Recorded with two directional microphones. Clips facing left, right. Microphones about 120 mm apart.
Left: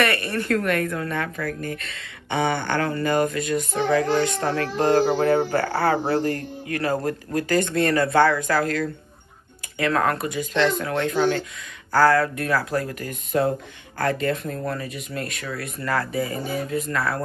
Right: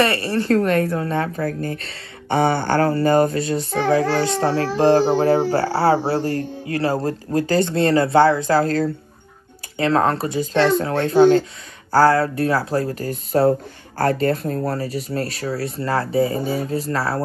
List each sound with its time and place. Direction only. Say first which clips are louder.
0.0 s speech: right 4 dB; 30° right (ahead or behind)